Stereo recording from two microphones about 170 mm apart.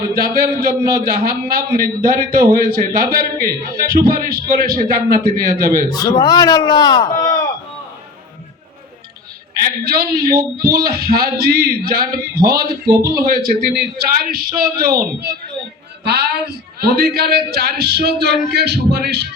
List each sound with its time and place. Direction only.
0.1 s a man's voice: 60° right (ahead or behind)
5.9 s a man's voice: 25° left (ahead or behind)
9.6 s a man's voice: 65° right (ahead or behind)
16.8 s a man's voice: 65° right (ahead or behind)